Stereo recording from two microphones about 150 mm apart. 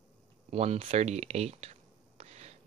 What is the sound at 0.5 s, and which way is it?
Speech, 45° right (ahead or behind).